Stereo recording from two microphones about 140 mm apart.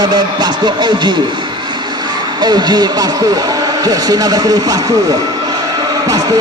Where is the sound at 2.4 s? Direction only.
30° right (ahead or behind).